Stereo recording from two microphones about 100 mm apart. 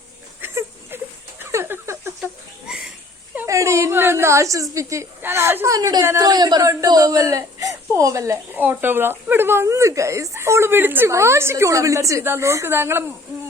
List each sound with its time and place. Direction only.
0.4 s a sound: 20° right (ahead or behind)
3.4 s whimper: 30° right (ahead or behind)
4.7 s a woman's voice: 30° right (ahead or behind)
8.5 s speech: 20° right (ahead or behind)